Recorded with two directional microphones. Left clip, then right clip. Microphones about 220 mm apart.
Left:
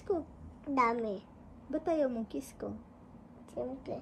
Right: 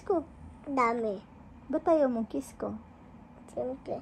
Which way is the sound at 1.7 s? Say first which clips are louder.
Right 6 dB; 15° right (ahead or behind).